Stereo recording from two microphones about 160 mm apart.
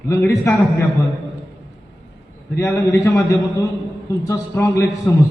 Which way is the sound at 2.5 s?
20° left (ahead or behind).